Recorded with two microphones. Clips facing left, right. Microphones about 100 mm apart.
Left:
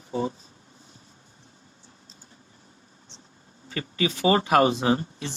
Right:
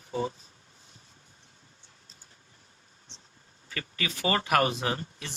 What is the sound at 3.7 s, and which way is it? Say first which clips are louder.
Speech: left 8 dB; 25° left (ahead or behind).